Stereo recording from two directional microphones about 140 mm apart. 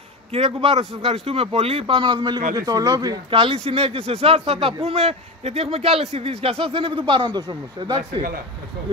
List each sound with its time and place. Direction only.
0.3 s a man's voice: 45° right (ahead or behind)